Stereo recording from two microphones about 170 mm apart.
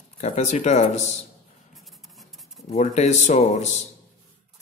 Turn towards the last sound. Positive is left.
turn(degrees=45)  # may be behind; listen again after turning